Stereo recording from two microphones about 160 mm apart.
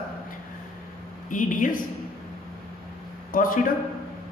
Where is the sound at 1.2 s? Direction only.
55° left (ahead or behind).